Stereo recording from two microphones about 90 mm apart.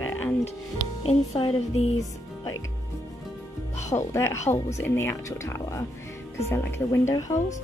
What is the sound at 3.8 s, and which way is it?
Speech, 30° left (ahead or behind).